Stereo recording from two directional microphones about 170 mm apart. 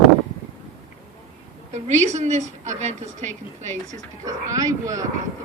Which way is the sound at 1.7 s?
45° right (ahead or behind).